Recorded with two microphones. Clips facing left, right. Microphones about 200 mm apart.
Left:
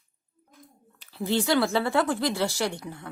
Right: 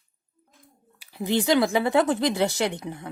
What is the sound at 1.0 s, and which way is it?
A woman's voice, 15° right (ahead or behind).